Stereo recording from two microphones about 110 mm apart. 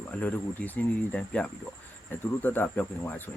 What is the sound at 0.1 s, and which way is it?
Speech, 15° left (ahead or behind).